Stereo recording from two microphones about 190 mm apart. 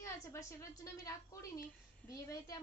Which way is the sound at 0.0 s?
15° left (ahead or behind).